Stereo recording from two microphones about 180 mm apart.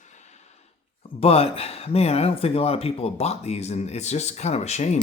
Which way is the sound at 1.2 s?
35° left (ahead or behind).